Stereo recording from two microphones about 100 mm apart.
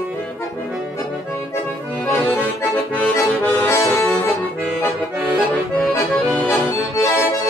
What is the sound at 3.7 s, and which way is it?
Accordion, 25° left (ahead or behind).